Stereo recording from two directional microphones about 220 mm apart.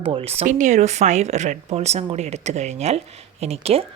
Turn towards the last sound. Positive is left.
turn(degrees=-25)  # may be behind; listen again after turning